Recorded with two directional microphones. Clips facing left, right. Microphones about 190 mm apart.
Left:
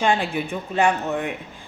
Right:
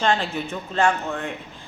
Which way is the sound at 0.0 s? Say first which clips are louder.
Left 1 dB; 15° left (ahead or behind).